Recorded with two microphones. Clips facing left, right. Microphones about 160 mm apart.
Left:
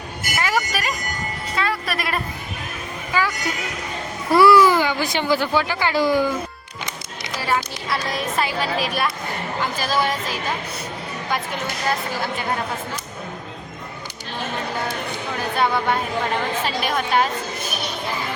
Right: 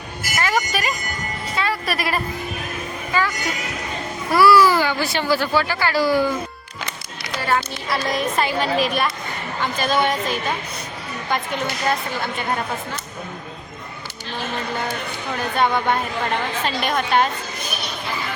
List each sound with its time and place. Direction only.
0.3 s a woman's voice: 5° left (ahead or behind)
4.3 s speech: 20° left (ahead or behind)
7.3 s a woman's voice: centre (ahead or behind)
15.5 s a woman's voice: 5° left (ahead or behind)